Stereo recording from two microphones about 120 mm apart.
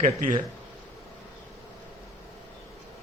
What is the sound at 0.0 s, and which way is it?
Speech, 90° right.